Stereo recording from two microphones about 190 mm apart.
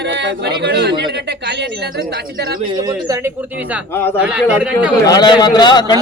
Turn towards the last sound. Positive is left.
turn(degrees=20)  # may be behind; listen again after turning